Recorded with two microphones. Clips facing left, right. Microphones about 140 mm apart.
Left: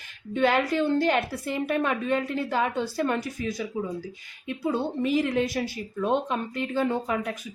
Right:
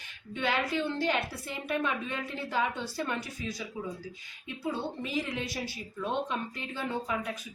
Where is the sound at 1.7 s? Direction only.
60° left (ahead or behind).